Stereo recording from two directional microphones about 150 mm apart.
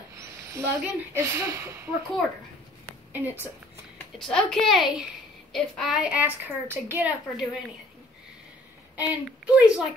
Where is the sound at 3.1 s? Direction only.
10° right (ahead or behind).